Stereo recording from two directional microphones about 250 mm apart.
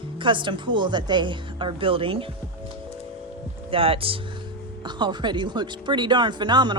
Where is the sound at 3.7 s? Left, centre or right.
Right.